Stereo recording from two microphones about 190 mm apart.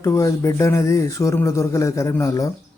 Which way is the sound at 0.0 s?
15° left (ahead or behind).